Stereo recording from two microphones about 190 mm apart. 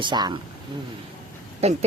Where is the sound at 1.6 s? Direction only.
35° right (ahead or behind).